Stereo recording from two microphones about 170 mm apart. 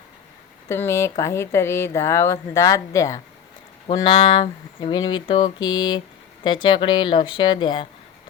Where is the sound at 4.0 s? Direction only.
30° left (ahead or behind).